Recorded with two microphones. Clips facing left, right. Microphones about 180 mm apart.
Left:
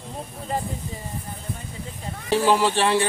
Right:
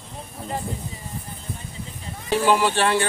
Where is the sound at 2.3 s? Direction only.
Centre (ahead or behind).